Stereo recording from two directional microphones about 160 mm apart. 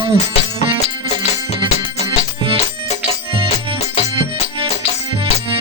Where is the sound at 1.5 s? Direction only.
30° right (ahead or behind).